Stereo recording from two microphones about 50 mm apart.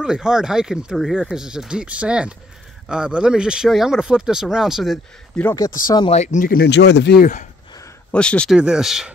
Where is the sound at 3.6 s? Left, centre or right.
Centre.